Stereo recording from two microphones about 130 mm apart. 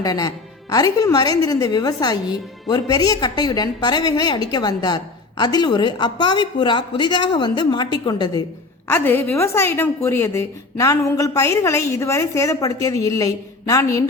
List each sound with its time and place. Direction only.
0.0 s a woman's voice: 30° left (ahead or behind)
8.9 s a woman's voice: 15° left (ahead or behind)